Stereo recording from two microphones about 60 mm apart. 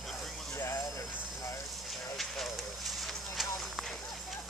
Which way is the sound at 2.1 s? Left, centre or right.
Centre.